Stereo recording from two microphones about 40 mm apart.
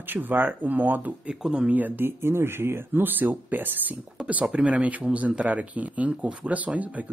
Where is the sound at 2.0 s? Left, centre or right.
Right.